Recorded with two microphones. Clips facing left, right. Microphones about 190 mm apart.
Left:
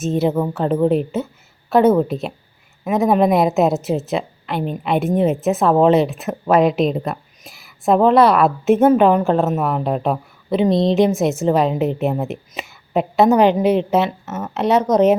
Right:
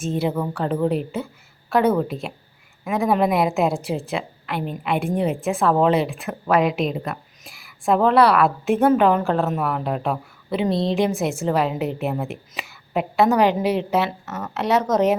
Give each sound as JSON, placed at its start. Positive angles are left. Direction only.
{"t": 0.0, "sound": "a woman's voice", "side_deg": 25}